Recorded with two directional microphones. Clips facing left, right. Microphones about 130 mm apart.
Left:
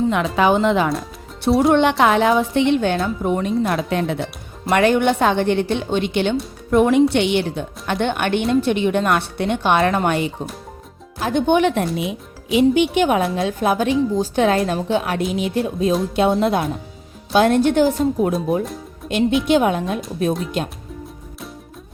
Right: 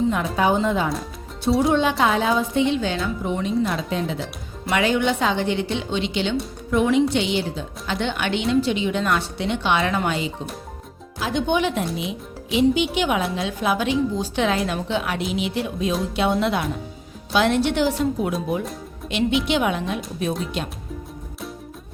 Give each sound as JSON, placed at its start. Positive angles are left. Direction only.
{"t": 0.1, "sound": "speech", "side_deg": 85}
{"t": 1.5, "sound": "a woman's voice", "side_deg": 65}
{"t": 19.4, "sound": "speech", "side_deg": 45}
{"t": 20.3, "sound": "speech", "side_deg": 0}